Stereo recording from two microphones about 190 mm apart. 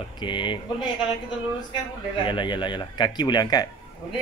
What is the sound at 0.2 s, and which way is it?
Speech, 25° left (ahead or behind).